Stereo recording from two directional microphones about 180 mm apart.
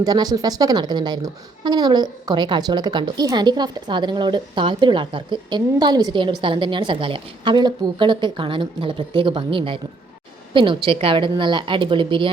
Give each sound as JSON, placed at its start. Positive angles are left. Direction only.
{"t": 0.0, "sound": "a woman's voice", "side_deg": -20}